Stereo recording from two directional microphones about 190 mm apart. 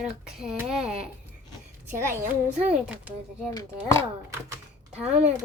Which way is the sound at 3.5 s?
20° left (ahead or behind).